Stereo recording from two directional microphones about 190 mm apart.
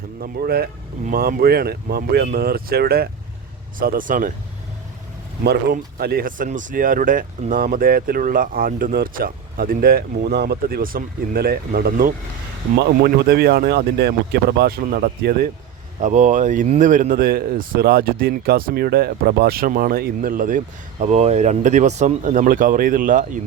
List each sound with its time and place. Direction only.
0.2 s speech: 55° right (ahead or behind)
5.4 s speech: 60° right (ahead or behind)
16.0 s speech: 40° right (ahead or behind)
21.0 s speech: 35° right (ahead or behind)